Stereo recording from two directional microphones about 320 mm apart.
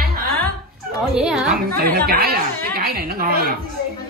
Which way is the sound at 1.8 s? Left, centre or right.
Right.